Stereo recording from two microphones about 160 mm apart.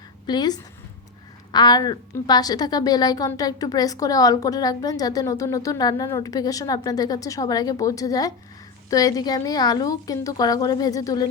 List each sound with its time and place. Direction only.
0.3 s a woman's voice: 25° left (ahead or behind)